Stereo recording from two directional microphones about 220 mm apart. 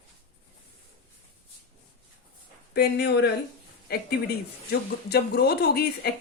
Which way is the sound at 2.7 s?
45° left (ahead or behind).